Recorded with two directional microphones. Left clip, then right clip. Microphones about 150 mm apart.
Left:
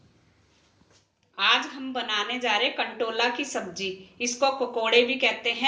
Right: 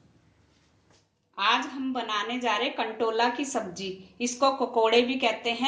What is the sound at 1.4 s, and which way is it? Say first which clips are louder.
A woman's voice: left 2 dB; 90° right.